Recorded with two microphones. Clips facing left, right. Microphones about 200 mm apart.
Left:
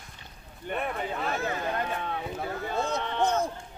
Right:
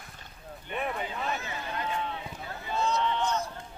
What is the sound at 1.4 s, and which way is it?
Speech, 50° left (ahead or behind).